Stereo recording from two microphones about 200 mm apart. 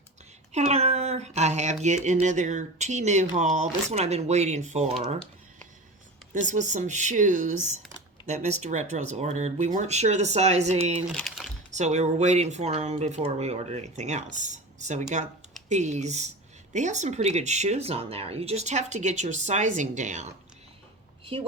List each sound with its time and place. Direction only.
0.5 s speech: 35° right (ahead or behind)
6.5 s speech: 40° right (ahead or behind)
11.1 s typing: centre (ahead or behind)
11.7 s speech: 35° right (ahead or behind)